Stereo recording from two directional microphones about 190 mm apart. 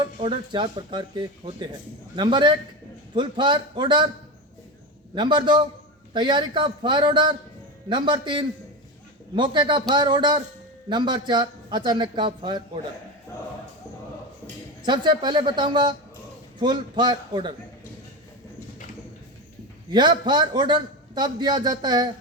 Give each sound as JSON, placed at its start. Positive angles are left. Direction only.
{"t": 0.0, "sound": "a man's voice", "side_deg": -25}
{"t": 5.1, "sound": "a man's voice", "side_deg": -25}
{"t": 14.8, "sound": "a man's voice", "side_deg": -25}
{"t": 19.9, "sound": "a man's voice", "side_deg": -25}